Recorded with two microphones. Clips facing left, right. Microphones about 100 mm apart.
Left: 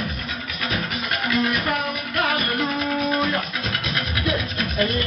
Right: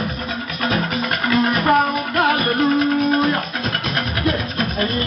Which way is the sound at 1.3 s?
35° right (ahead or behind).